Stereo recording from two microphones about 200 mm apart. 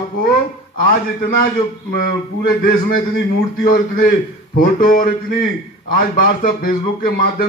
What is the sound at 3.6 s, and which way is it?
Speech, 45° left (ahead or behind).